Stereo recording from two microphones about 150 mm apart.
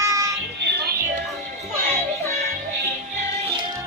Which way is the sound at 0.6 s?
90° right.